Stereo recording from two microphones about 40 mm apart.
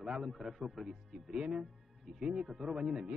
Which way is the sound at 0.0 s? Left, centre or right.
Centre.